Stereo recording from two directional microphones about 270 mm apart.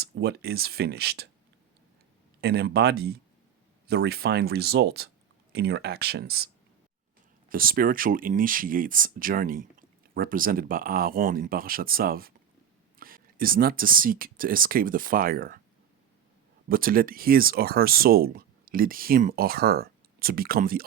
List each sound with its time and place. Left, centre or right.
0.0 s speech: right
2.4 s speech: right
7.5 s speech: right
16.6 s speech: right